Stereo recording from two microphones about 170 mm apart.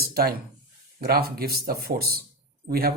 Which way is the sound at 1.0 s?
65° right (ahead or behind).